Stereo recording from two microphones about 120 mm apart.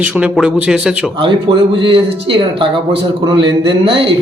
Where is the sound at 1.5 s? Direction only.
45° right (ahead or behind).